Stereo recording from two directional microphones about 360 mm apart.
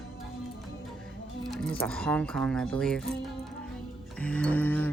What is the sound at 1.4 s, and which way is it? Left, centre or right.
Speech, centre.